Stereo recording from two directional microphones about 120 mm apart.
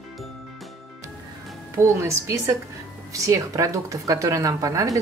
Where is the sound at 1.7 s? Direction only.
20° right (ahead or behind).